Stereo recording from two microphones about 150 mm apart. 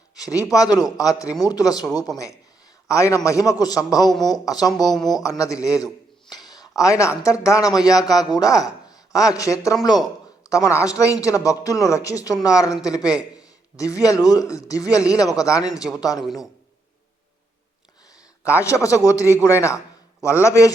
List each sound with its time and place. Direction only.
0.3 s a man's voice: 25° left (ahead or behind)
6.3 s a sound: 25° left (ahead or behind)
7.2 s a man's voice: 20° left (ahead or behind)
16.2 s a man's voice: centre (ahead or behind)
18.6 s a man's voice: 20° left (ahead or behind)